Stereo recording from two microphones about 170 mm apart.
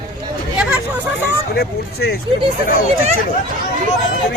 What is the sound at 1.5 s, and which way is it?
Speech, 70° left (ahead or behind).